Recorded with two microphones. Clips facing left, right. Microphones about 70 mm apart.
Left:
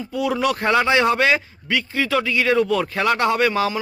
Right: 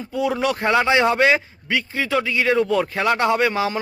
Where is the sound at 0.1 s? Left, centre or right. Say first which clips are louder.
Even; right.